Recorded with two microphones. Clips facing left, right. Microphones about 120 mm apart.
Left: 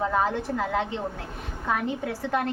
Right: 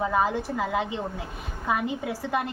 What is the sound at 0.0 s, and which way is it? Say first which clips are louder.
A woman's voice: even; 10° right (ahead or behind).